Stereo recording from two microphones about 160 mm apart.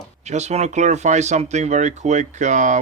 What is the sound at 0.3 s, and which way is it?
Speech, 45° right (ahead or behind).